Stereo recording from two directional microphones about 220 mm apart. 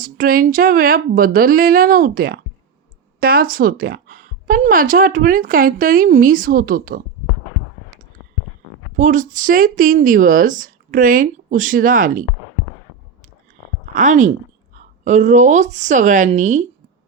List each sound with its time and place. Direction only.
0.0 s a woman's voice: 40° right (ahead or behind)
9.0 s a woman's voice: 35° right (ahead or behind)
13.9 s a woman's voice: 35° right (ahead or behind)